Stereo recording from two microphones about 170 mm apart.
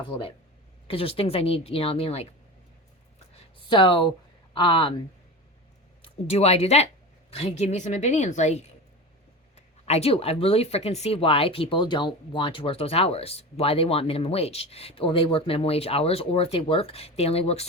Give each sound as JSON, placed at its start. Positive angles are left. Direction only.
{"t": 0.9, "sound": "speech", "side_deg": 35}
{"t": 3.7, "sound": "speech", "side_deg": 30}
{"t": 6.2, "sound": "speech", "side_deg": 35}